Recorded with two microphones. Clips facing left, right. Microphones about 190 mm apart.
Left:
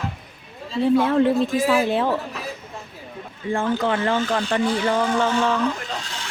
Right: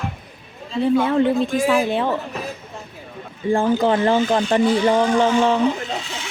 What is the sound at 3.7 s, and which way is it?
Speech, 35° right (ahead or behind).